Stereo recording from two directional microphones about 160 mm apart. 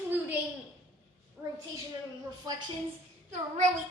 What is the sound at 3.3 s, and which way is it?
Speech, 50° right (ahead or behind).